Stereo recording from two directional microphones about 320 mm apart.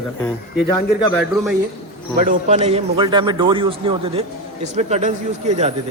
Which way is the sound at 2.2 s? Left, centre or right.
Right.